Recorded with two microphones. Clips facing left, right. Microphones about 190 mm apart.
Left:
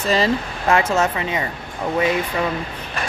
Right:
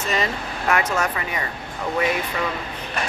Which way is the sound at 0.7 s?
25° left (ahead or behind).